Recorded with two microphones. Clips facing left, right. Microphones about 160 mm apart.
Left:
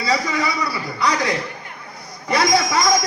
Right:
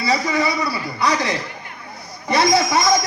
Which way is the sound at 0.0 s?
25° right (ahead or behind).